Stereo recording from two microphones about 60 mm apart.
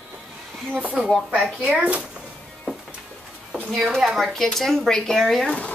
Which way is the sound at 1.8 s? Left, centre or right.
Right.